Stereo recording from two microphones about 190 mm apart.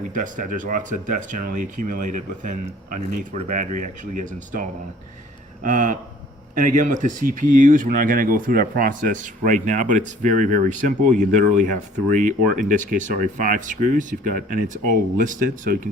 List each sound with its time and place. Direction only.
0.1 s speech: 45° right (ahead or behind)
5.6 s speech: 45° right (ahead or behind)